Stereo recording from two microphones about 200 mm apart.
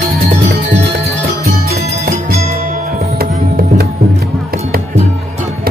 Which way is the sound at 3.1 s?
45° right (ahead or behind).